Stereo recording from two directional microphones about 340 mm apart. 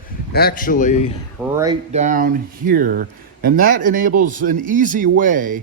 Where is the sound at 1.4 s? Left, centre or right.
Centre.